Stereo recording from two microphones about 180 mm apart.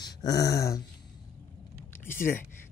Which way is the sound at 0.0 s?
20° left (ahead or behind).